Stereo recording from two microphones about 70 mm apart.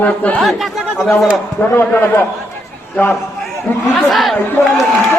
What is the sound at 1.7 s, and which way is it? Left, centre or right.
A man's voice, left.